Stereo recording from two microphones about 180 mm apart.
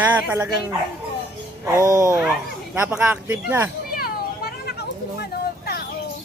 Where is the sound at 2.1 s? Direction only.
10° right (ahead or behind).